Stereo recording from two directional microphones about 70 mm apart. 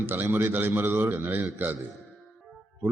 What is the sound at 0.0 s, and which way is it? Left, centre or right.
A man's voice, right.